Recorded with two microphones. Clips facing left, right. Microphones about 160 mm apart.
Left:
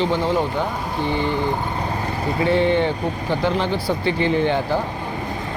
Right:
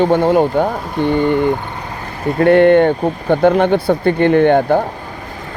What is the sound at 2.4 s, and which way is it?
Speech, 60° right (ahead or behind).